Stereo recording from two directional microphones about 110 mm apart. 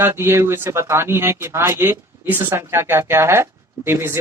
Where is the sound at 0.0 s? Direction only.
25° right (ahead or behind).